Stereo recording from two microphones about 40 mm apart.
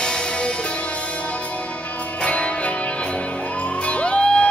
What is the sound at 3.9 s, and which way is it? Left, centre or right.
Music, left.